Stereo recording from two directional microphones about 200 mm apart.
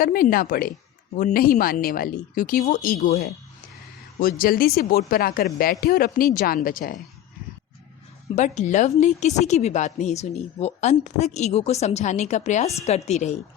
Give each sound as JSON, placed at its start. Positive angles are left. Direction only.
{"t": 0.0, "sound": "a woman's voice", "side_deg": 45}
{"t": 8.4, "sound": "speech", "side_deg": 35}